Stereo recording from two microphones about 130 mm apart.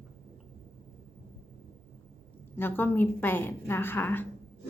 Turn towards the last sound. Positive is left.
turn(degrees=15)  # may be behind; listen again after turning